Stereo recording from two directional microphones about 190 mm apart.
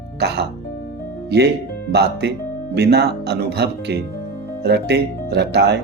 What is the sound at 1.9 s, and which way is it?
Speech, 60° right (ahead or behind).